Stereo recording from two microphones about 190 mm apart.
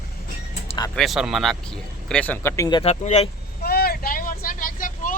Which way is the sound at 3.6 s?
55° left (ahead or behind).